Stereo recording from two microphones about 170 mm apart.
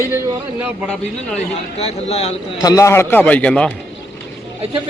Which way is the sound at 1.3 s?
40° left (ahead or behind).